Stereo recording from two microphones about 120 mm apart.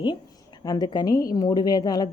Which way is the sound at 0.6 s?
35° left (ahead or behind).